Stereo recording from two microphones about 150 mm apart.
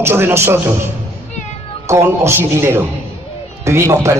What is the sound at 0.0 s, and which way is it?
Speech, 15° right (ahead or behind).